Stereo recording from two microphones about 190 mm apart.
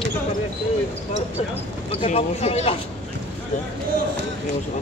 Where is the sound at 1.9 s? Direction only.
30° left (ahead or behind).